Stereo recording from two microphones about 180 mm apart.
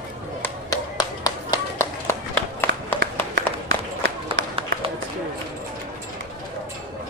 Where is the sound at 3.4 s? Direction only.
80° right.